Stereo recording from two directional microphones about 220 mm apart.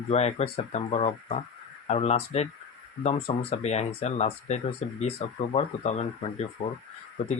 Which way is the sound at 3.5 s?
30° left (ahead or behind).